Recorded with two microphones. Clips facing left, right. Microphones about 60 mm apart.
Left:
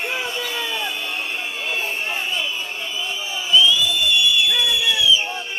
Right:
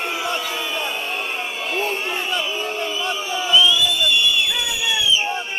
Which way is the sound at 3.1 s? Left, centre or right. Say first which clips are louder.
Right 4 dB; right.